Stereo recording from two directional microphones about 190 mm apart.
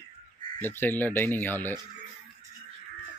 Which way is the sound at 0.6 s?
10° left (ahead or behind).